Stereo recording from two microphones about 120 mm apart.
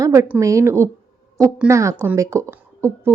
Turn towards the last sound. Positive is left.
turn(degrees=-20)  # may be behind; listen again after turning